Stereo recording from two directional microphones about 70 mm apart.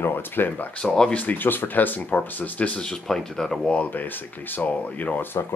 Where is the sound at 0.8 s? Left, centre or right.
Centre.